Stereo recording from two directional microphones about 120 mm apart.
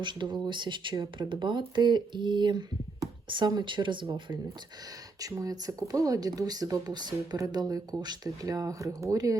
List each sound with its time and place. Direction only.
0.0 s speech: 40° right (ahead or behind)
5.2 s speech: 30° right (ahead or behind)